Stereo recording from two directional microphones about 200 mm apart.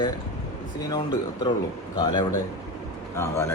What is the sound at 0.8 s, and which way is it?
Speech, 20° left (ahead or behind).